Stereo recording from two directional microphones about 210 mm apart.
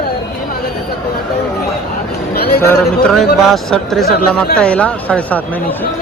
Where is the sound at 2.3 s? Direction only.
50° left (ahead or behind).